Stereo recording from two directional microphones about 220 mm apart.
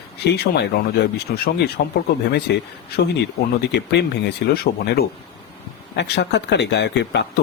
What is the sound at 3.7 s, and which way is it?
Speech, 50° left (ahead or behind).